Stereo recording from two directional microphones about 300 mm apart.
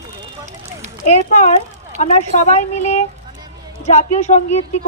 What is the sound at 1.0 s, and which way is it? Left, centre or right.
A woman's voice, left.